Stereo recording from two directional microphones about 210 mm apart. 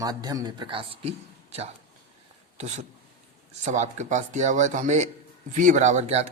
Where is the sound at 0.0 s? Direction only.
20° right (ahead or behind).